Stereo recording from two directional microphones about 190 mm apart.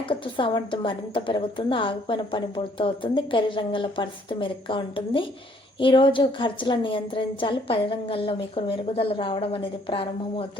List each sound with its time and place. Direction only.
0.0 s a woman's voice: 25° left (ahead or behind)